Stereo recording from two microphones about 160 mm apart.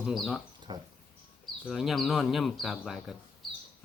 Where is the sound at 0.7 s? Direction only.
25° right (ahead or behind).